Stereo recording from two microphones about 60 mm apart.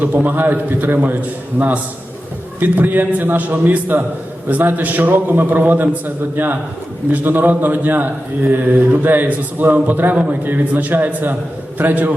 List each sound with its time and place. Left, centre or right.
0.0 s a man's voice: right